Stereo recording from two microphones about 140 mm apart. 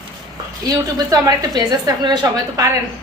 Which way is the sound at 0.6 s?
25° right (ahead or behind).